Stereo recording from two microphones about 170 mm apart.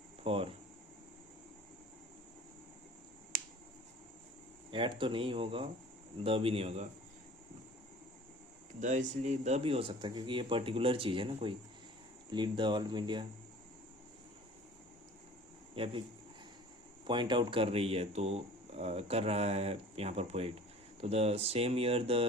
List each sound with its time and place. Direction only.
0.3 s speech: 35° right (ahead or behind)
4.7 s speech: 30° right (ahead or behind)
8.8 s speech: 45° right (ahead or behind); by 13.2 s 25° right (ahead or behind)
15.7 s speech: 35° right (ahead or behind)
17.1 s speech: 30° right (ahead or behind)